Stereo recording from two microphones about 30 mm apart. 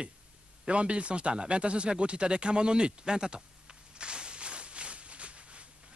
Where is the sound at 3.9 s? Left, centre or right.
Right.